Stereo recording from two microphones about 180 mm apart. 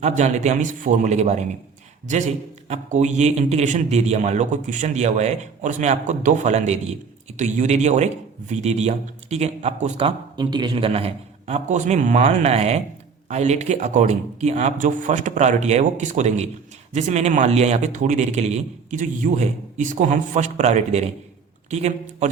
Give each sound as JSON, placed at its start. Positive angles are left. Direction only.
{"t": 0.2, "sound": "speech", "side_deg": -40}
{"t": 2.6, "sound": "speech", "side_deg": -40}